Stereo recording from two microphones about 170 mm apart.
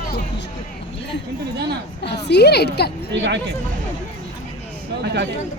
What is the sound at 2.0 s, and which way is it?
Speech, 85° left.